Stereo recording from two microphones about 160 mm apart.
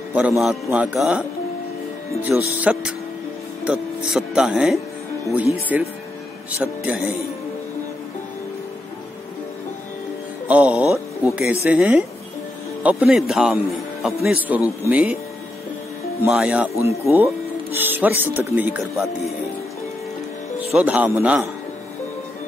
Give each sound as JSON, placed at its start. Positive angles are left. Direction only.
{"t": 0.1, "sound": "speech", "side_deg": -10}
{"t": 2.3, "sound": "speech", "side_deg": 0}
{"t": 10.5, "sound": "speech", "side_deg": -10}
{"t": 16.3, "sound": "speech", "side_deg": -5}
{"t": 20.7, "sound": "speech", "side_deg": -10}